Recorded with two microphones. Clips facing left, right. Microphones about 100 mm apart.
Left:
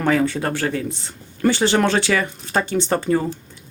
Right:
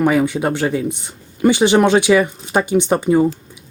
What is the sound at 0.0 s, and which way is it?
Speech, 15° right (ahead or behind).